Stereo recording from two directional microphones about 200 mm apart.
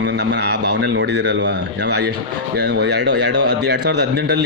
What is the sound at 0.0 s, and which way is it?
A man's voice, 60° right (ahead or behind).